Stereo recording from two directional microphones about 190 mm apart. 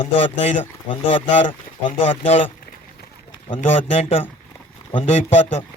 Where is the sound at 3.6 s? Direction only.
30° left (ahead or behind).